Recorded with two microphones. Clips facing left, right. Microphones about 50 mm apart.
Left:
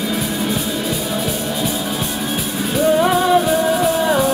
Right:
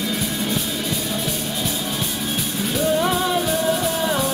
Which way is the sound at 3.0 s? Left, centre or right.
Centre.